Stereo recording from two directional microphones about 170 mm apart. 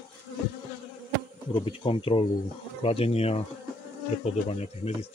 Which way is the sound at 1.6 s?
35° left (ahead or behind).